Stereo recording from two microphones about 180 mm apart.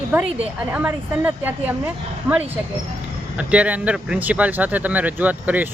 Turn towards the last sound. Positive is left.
turn(degrees=-10)  # may be behind; listen again after turning